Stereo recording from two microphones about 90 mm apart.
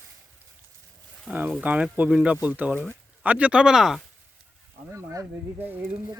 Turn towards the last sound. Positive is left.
turn(degrees=-25)  # may be behind; listen again after turning